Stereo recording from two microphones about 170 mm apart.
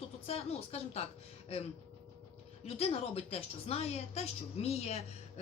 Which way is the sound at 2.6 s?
35° left (ahead or behind).